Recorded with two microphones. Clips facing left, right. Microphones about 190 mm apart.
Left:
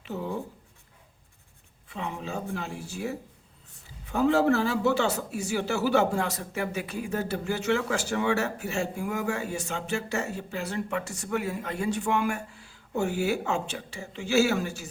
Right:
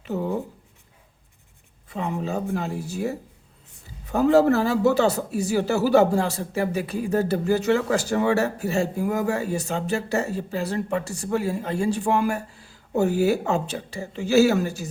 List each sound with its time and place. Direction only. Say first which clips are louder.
0.0 s speech: right 6 dB; 45° right (ahead or behind)
1.9 s a man's voice: right 7 dB; 40° right (ahead or behind)